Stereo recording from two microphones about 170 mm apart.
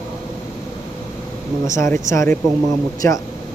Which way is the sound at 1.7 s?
15° left (ahead or behind).